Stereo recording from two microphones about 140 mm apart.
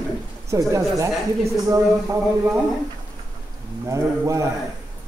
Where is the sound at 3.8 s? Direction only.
20° right (ahead or behind).